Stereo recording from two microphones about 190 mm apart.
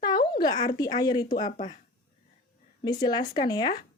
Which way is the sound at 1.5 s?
40° left (ahead or behind).